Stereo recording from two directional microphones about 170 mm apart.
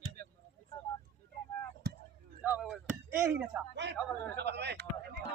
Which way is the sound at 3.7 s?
90° right.